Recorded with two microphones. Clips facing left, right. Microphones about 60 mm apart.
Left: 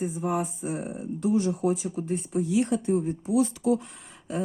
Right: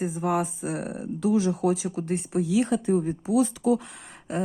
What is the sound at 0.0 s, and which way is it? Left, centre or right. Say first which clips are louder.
Speech: right 2 dB; right.